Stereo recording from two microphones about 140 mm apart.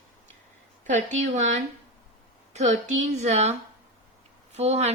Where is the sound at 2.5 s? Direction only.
55° right (ahead or behind).